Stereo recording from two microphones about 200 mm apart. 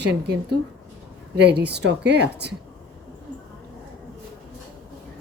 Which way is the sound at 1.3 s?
55° right (ahead or behind).